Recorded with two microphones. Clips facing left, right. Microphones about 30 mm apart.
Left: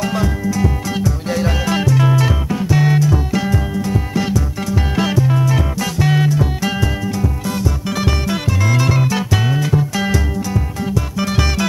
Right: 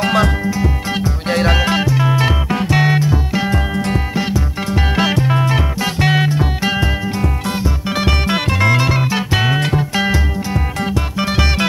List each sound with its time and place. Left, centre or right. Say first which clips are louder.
0.0 s music: right 5 dB; right
0.5 s music: even; right
1.3 s music: right 6 dB; right
1.7 s music: even; right
2.5 s music: right 1 dB; right
2.9 s music: even; right
3.4 s music: right 1 dB; right
4.1 s music: even; right
4.6 s music: right 3 dB; right